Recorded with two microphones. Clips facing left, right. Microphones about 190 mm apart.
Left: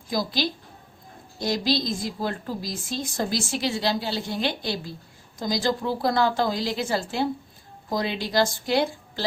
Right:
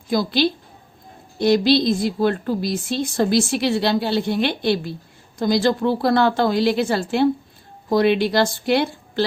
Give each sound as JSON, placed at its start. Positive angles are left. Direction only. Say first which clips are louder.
{"t": 0.1, "sound": "speech", "louder": "right 7 dB", "side_deg": -65}